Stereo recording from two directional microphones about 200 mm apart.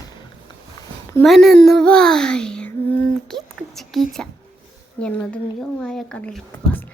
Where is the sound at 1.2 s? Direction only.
Centre (ahead or behind).